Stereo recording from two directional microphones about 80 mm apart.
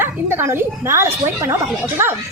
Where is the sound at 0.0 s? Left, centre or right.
Right.